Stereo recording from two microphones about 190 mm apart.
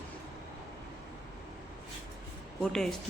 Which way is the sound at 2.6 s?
5° left (ahead or behind).